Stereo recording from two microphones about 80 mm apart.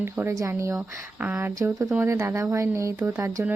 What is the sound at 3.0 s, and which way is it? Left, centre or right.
Speech, right.